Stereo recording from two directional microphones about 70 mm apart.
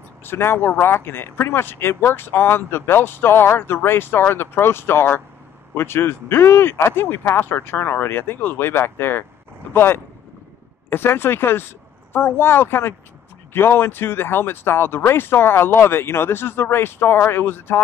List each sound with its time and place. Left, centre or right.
0.2 s speech: left